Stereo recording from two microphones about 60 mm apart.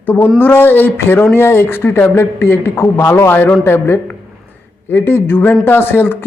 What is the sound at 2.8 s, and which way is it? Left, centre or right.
Speech, left.